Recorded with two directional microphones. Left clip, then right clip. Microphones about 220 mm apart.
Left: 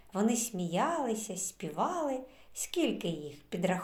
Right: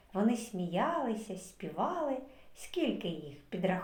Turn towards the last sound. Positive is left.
turn(degrees=35)  # may be behind; listen again after turning